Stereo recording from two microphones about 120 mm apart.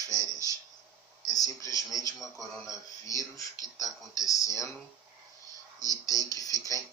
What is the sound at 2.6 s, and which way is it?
Speech, 25° left (ahead or behind).